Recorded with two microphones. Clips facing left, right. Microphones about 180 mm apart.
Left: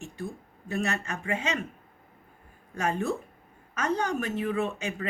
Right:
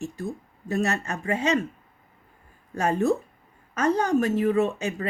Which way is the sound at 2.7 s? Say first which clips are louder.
Right 6 dB; 40° right (ahead or behind).